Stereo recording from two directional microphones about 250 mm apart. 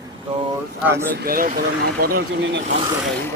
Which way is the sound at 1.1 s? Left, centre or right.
Right.